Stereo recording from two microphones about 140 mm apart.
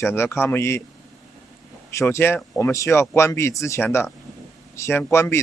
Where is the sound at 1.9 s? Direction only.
20° left (ahead or behind).